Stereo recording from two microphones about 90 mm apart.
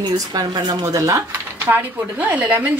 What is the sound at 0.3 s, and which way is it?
Speech, 50° right (ahead or behind).